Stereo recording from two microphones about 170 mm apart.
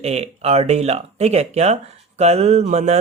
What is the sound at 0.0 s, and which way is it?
Speech, 40° right (ahead or behind).